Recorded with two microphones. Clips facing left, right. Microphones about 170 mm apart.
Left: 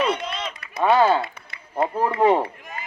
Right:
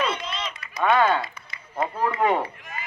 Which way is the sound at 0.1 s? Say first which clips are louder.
Left 4 dB; 55° left (ahead or behind).